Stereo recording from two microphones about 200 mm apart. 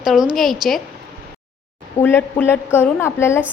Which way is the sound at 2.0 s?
10° left (ahead or behind).